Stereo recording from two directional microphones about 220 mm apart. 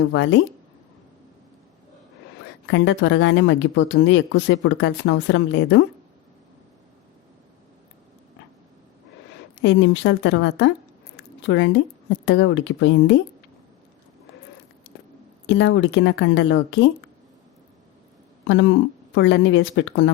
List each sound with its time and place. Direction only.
0.1 s speech: 55° left (ahead or behind)
2.6 s speech: 55° left (ahead or behind)
9.6 s speech: 55° left (ahead or behind)
15.4 s speech: 55° left (ahead or behind)
19.1 s speech: 60° left (ahead or behind)